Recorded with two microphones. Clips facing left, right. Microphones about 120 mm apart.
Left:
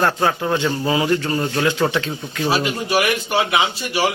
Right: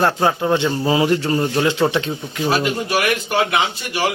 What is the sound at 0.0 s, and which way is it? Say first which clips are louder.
Speech: right 2 dB; 20° right (ahead or behind).